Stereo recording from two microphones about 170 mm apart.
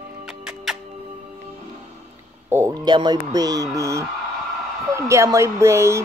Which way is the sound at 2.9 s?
25° right (ahead or behind).